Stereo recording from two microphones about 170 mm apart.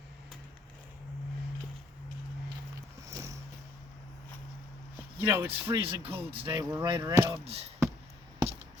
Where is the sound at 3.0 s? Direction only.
20° right (ahead or behind).